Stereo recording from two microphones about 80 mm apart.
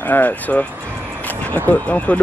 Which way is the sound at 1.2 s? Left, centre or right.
Centre.